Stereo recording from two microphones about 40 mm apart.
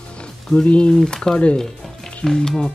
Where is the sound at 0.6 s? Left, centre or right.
Left.